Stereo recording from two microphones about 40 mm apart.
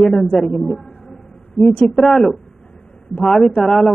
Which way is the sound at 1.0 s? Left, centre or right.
Centre.